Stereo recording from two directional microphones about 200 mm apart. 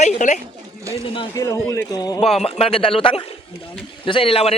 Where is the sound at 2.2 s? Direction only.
30° left (ahead or behind).